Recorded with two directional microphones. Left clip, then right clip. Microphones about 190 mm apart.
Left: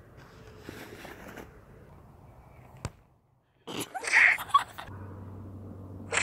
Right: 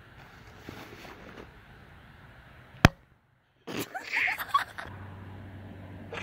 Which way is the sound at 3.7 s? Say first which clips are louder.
Left 6 dB; 25° right (ahead or behind).